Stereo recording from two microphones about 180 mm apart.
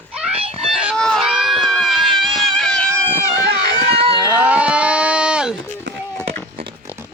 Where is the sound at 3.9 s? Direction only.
30° right (ahead or behind).